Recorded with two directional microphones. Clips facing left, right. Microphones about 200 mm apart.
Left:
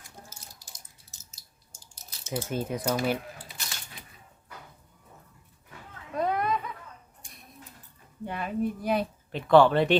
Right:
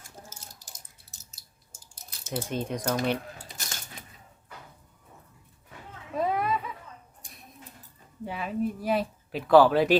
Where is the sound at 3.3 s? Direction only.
45° right (ahead or behind).